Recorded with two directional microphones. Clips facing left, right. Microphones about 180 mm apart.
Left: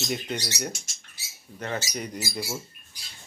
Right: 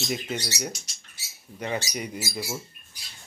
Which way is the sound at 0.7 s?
50° left (ahead or behind).